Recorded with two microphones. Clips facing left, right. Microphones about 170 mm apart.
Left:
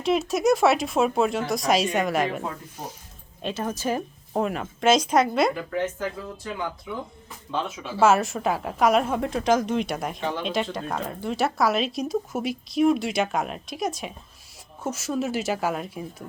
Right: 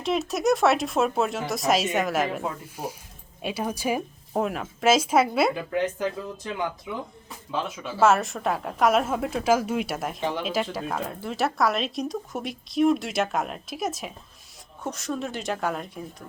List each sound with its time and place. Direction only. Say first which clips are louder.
0.0 s speech: left 2 dB; centre (ahead or behind)
5.5 s speech: right 1 dB; 15° right (ahead or behind)
7.5 s speech: left 1 dB; centre (ahead or behind)